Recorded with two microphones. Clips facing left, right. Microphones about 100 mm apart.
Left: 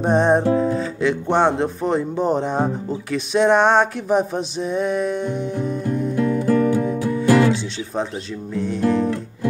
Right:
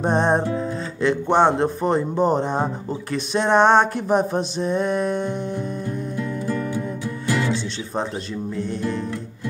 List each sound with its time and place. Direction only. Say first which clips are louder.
0.0 s speech: left 3 dB; centre (ahead or behind)
6.1 s music: left 9 dB; 55° left (ahead or behind)